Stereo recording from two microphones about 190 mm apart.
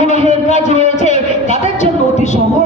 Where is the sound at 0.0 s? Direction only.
35° left (ahead or behind).